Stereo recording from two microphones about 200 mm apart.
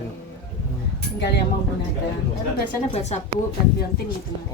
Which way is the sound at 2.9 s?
35° left (ahead or behind).